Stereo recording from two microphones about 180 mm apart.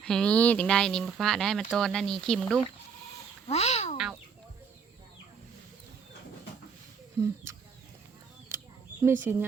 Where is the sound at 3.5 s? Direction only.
35° left (ahead or behind).